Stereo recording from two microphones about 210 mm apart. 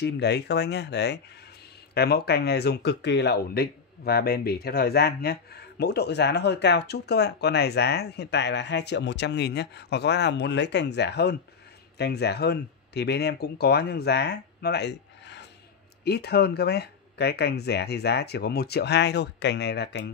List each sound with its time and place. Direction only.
0.0 s speech: 55° left (ahead or behind)